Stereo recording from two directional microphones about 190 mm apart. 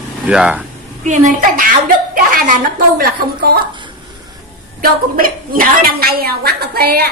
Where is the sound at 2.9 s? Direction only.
55° right (ahead or behind).